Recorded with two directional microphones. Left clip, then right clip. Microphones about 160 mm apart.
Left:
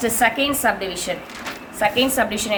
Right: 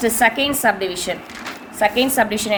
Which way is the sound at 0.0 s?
30° right (ahead or behind).